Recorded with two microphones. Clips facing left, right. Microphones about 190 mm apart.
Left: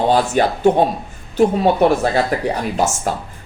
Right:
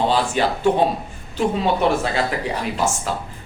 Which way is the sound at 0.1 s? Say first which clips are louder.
Left 4 dB; 45° left (ahead or behind).